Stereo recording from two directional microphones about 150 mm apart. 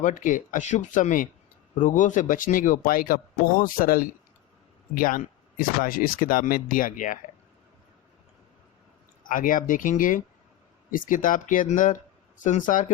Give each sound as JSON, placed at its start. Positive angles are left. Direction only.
{"t": 0.0, "sound": "a man's voice", "side_deg": 60}
{"t": 9.3, "sound": "a man's voice", "side_deg": 65}